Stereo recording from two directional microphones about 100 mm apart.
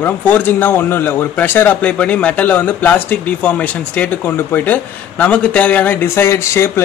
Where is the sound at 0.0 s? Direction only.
15° left (ahead or behind).